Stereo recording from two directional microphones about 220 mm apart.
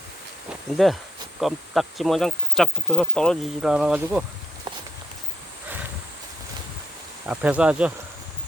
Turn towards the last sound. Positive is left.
turn(degrees=-5)  # may be behind; listen again after turning